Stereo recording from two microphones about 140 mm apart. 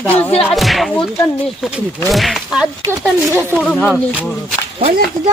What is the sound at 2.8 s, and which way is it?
Speech, 20° right (ahead or behind).